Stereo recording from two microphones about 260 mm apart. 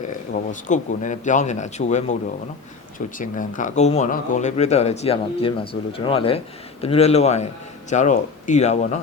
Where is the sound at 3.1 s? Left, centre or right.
Left.